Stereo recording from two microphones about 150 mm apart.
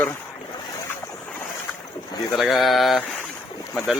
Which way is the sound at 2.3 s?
Centre (ahead or behind).